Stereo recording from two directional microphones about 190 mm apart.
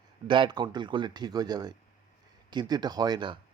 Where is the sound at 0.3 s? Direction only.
25° right (ahead or behind).